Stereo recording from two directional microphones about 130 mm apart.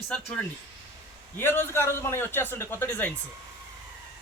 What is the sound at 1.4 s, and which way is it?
A man's voice, 15° left (ahead or behind).